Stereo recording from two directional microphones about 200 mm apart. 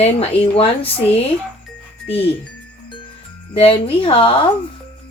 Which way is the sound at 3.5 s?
30° left (ahead or behind).